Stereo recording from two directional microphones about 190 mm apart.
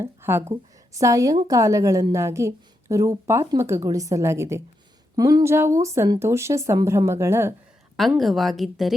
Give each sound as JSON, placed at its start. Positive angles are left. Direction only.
{"t": 0.0, "sound": "a woman's voice", "side_deg": -10}
{"t": 7.9, "sound": "a woman's voice", "side_deg": 0}